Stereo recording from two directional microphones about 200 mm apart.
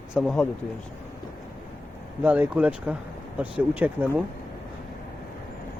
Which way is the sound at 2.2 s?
10° right (ahead or behind).